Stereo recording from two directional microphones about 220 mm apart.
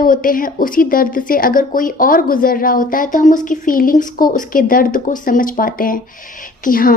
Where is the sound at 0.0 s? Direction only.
40° left (ahead or behind).